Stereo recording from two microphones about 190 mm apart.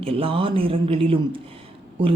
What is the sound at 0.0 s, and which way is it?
Speech, 30° right (ahead or behind).